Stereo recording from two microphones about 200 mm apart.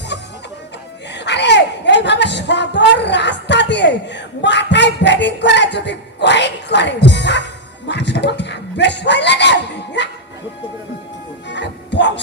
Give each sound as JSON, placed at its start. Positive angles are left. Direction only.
{"t": 0.1, "sound": "chicken", "side_deg": 60}
{"t": 1.1, "sound": "speech", "side_deg": 60}
{"t": 11.4, "sound": "music", "side_deg": 60}